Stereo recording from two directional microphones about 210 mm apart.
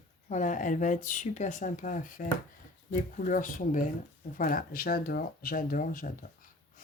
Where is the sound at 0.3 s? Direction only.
35° left (ahead or behind).